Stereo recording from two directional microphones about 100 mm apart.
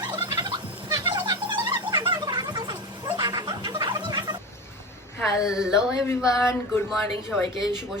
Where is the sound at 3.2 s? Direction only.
50° right (ahead or behind).